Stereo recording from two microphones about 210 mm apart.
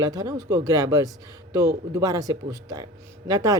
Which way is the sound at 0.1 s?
15° right (ahead or behind).